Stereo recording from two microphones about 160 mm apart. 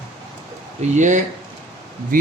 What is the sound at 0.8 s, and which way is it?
Speech, 50° right (ahead or behind).